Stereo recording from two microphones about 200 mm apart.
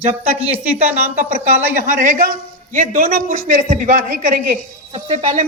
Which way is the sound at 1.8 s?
40° right (ahead or behind).